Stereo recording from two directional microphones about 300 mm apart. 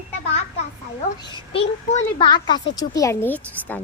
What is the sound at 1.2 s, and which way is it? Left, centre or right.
A woman's voice, centre.